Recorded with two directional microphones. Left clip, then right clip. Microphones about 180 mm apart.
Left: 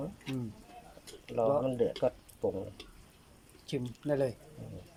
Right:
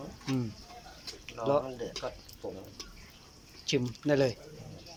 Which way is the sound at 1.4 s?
45° left (ahead or behind).